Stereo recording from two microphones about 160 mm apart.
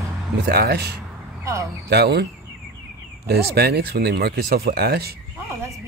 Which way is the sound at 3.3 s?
85° right.